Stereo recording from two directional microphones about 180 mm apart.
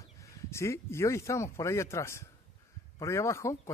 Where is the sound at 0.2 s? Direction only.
15° left (ahead or behind).